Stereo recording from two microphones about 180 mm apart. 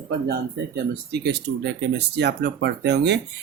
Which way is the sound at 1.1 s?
70° right (ahead or behind).